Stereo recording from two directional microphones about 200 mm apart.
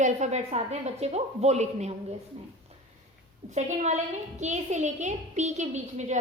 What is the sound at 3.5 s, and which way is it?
A woman's voice, 35° right (ahead or behind).